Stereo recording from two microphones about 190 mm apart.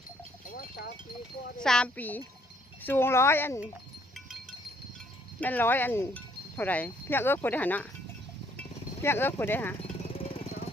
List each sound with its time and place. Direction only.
0.5 s sheep: 55° left (ahead or behind)
1.6 s speech: 5° left (ahead or behind)
5.4 s speech: 10° left (ahead or behind)
8.5 s cowbell: 10° left (ahead or behind)
10.0 s jackhammer: 30° left (ahead or behind)